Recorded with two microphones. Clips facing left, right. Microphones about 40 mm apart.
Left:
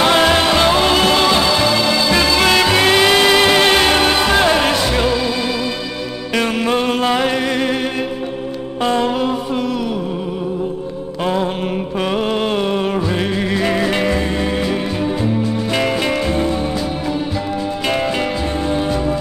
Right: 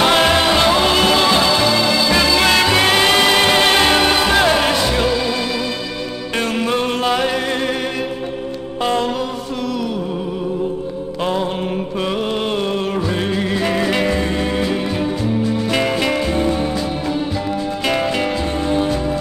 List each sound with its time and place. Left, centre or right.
0.0 s music: centre
6.4 s music: centre
13.4 s music: centre
16.1 s music: centre
18.7 s music: centre